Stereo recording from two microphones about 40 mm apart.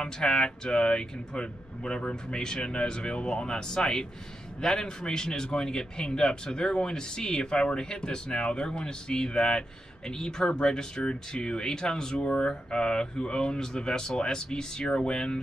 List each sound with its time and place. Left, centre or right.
0.0 s a man's voice: centre